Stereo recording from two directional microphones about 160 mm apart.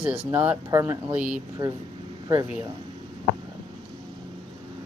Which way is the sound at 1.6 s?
25° right (ahead or behind).